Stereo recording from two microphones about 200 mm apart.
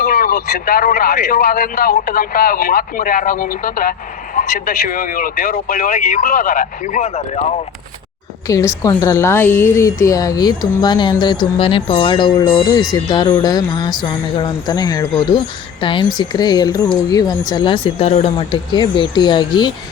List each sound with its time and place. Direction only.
0.0 s a man's voice: 45° left (ahead or behind)
8.4 s speech: 15° left (ahead or behind)